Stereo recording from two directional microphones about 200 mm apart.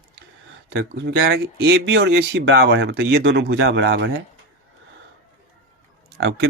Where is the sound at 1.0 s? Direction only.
55° right (ahead or behind).